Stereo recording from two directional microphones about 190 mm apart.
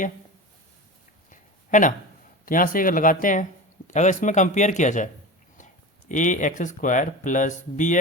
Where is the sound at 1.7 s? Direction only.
40° left (ahead or behind).